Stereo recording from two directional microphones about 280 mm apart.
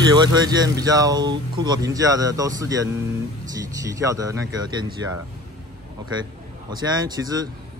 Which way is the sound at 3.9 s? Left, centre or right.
Centre.